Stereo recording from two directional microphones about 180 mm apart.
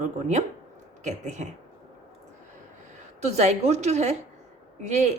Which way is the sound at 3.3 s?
40° right (ahead or behind).